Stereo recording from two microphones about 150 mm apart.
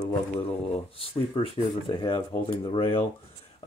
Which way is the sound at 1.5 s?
35° left (ahead or behind).